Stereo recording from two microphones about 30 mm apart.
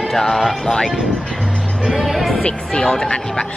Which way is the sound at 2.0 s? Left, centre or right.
Centre.